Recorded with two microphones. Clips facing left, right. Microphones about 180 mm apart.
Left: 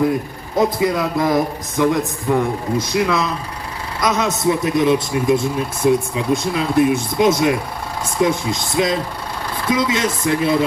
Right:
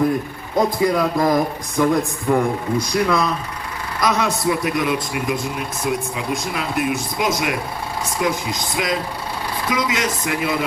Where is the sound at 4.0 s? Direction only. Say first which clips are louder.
Left 1 dB; 20° left (ahead or behind).